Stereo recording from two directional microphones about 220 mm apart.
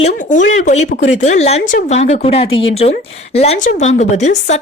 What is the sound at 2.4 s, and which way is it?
Speech, 60° left (ahead or behind).